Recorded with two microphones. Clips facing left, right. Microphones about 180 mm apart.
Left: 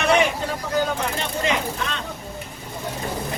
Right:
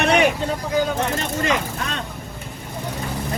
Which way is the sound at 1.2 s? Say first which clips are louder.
Right 1 dB; 45° right (ahead or behind).